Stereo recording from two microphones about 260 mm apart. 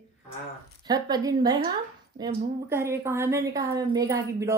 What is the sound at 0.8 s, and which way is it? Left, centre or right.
A woman's voice, centre.